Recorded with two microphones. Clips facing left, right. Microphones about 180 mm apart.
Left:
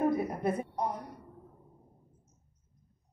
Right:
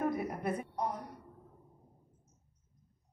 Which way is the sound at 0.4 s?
25° left (ahead or behind).